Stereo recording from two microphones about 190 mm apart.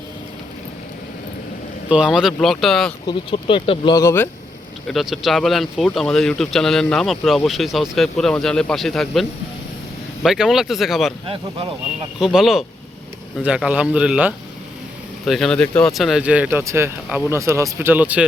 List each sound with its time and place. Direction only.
1.9 s speech: 5° right (ahead or behind)
3.1 s speech: 25° left (ahead or behind)
4.9 s speech: centre (ahead or behind)
10.2 s speech: centre (ahead or behind)
12.2 s speech: centre (ahead or behind)